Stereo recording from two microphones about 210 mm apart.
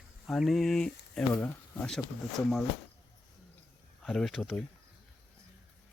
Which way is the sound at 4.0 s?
Centre (ahead or behind).